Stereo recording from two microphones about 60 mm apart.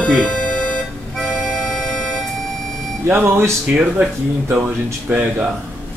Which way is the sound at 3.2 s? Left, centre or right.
Right.